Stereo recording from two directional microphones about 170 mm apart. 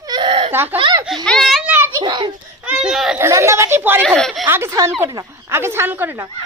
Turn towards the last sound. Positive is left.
turn(degrees=-10)  # may be behind; listen again after turning